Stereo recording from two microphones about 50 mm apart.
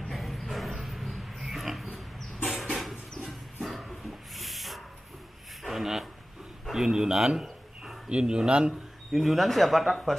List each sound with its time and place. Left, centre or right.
0.1 s dog: centre
0.8 s a sound: centre
6.7 s a man's voice: centre
7.4 s a sound: centre
8.1 s a man's voice: centre
9.1 s speech: centre